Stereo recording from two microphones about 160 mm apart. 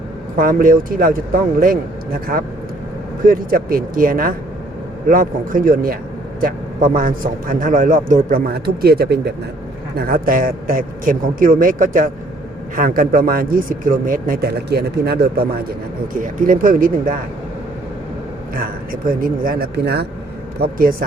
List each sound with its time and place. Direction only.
0.3 s a man's voice: 60° right (ahead or behind)
8.5 s speech: 80° right
10.0 s a man's voice: 65° right (ahead or behind); by 15.4 s 80° right
16.1 s a man's voice: 55° right (ahead or behind)
18.5 s speech: 65° right (ahead or behind); by 20.1 s 90° right
20.6 s a man's voice: 65° right (ahead or behind)